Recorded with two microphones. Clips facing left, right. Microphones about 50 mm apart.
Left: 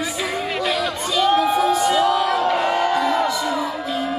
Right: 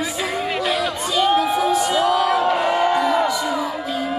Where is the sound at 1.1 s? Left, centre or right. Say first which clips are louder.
Even; centre.